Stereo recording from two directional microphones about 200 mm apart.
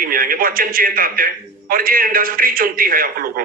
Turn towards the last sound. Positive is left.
turn(degrees=-45)  # may be behind; listen again after turning